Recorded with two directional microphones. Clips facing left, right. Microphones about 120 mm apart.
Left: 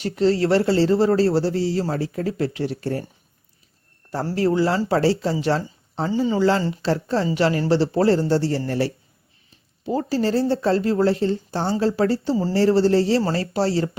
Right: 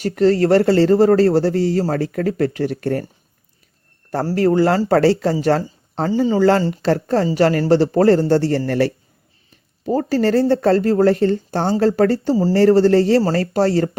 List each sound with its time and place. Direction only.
0.0 s speech: 50° right (ahead or behind)
4.4 s speech: 50° right (ahead or behind)
6.1 s speech: 35° right (ahead or behind)
6.7 s speech: 50° right (ahead or behind)
9.8 s speech: 50° right (ahead or behind)